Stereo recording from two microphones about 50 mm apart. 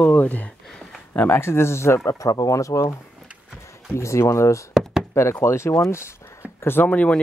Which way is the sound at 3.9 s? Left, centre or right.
Left.